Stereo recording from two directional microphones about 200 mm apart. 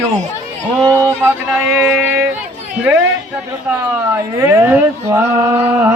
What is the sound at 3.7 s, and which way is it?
Speech, 10° right (ahead or behind).